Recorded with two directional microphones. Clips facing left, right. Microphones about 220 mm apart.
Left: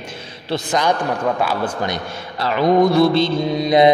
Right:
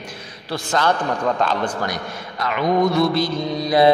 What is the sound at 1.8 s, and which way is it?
A man's voice, 30° left (ahead or behind).